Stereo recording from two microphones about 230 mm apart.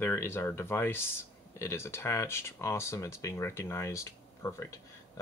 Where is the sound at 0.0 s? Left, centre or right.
Centre.